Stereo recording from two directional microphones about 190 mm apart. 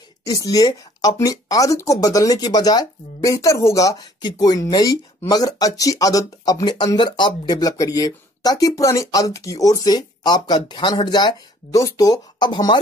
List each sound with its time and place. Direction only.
0.3 s speech: 20° left (ahead or behind)